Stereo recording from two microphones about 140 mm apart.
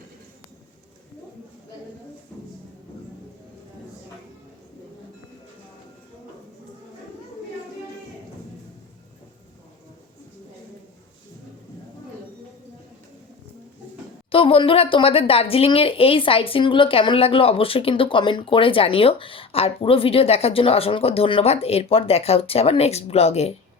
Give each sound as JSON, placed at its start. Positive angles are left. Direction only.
{"t": 14.3, "sound": "speech", "side_deg": 40}